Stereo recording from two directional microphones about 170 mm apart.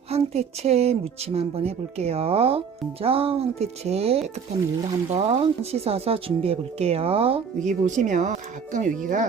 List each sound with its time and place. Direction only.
0.1 s speech: 40° right (ahead or behind)
7.7 s speech: 45° right (ahead or behind)